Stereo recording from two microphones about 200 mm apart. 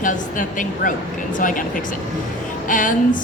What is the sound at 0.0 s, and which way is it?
Speech, 40° left (ahead or behind).